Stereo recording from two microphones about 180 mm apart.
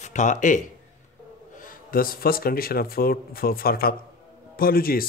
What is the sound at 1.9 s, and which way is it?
Speech, 55° left (ahead or behind).